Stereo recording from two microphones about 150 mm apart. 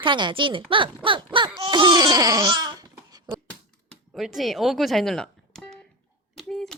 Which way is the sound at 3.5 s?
5° left (ahead or behind).